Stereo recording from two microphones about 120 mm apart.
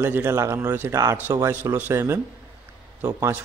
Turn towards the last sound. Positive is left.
turn(degrees=-20)  # may be behind; listen again after turning